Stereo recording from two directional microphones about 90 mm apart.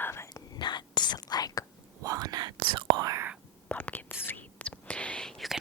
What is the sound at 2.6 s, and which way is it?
Whispering, 70° right (ahead or behind).